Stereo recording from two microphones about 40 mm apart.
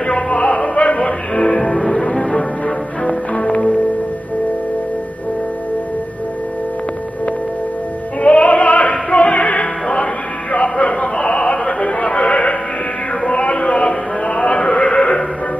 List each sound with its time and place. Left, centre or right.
0.0 s opera: left
0.7 s music: left
1.6 s music: centre
8.2 s music: left
11.5 s chatter: left
12.3 s music: left
13.4 s a sound: left